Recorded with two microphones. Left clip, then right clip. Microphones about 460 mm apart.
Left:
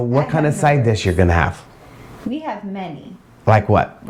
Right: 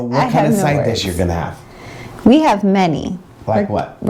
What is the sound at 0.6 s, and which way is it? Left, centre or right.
Speech, left.